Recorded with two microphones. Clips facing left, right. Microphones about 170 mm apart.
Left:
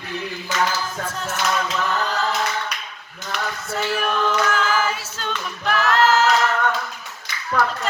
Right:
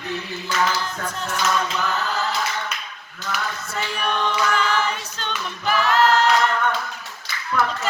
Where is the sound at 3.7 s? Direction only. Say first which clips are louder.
Left 3 dB; centre (ahead or behind).